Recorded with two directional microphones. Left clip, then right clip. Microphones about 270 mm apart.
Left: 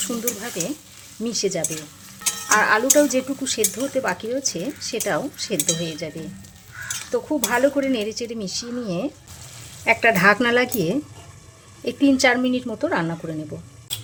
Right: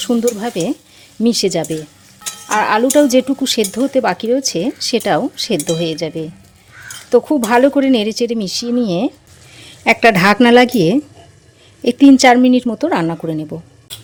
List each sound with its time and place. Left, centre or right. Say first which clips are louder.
1.2 s a woman's voice: right 9 dB; right